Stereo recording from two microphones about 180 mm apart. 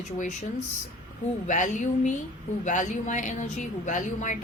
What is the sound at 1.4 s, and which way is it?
A woman's voice, 45° left (ahead or behind).